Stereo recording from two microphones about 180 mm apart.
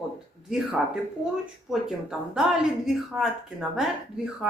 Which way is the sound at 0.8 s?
5° right (ahead or behind).